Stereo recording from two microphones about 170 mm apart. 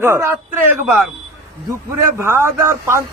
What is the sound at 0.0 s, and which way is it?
Speech, 15° right (ahead or behind).